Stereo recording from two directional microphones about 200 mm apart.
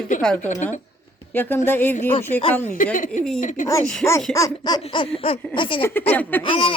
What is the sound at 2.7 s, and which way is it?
Speech, 40° left (ahead or behind).